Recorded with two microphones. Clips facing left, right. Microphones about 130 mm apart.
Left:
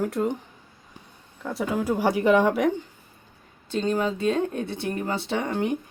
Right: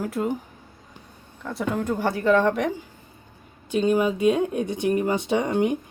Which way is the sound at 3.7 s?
10° right (ahead or behind).